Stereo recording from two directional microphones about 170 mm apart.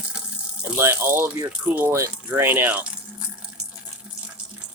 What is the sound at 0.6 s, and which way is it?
Speech, 15° right (ahead or behind).